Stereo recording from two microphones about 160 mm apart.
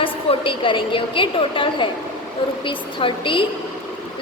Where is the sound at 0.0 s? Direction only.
30° left (ahead or behind).